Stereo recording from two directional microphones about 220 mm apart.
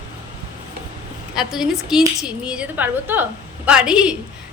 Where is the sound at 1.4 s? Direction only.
Centre (ahead or behind).